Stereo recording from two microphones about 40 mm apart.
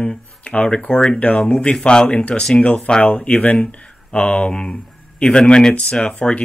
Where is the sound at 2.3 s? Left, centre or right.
Centre.